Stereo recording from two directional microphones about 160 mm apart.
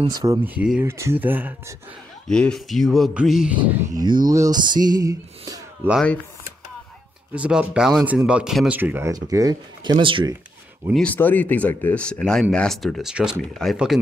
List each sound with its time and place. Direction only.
0.1 s speech: 25° right (ahead or behind)
0.6 s speech: 10° right (ahead or behind)
2.3 s speech: 5° left (ahead or behind)
3.9 s speech: 25° right (ahead or behind)
7.3 s speech: 5° right (ahead or behind); by 10.3 s 30° right (ahead or behind)
11.0 s speech: 10° left (ahead or behind)